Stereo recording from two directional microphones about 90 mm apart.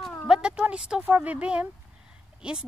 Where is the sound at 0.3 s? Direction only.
10° right (ahead or behind).